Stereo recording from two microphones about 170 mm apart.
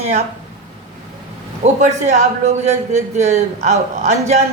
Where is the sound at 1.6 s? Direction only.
45° right (ahead or behind).